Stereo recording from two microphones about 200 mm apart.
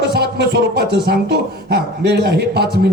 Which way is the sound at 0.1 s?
55° right (ahead or behind).